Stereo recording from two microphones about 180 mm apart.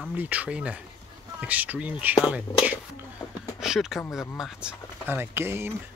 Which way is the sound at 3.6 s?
5° right (ahead or behind).